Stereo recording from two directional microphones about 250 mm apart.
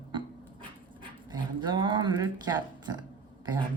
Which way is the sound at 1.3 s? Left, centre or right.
Centre.